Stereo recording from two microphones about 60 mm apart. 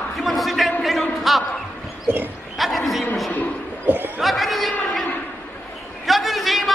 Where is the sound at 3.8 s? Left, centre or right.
Right.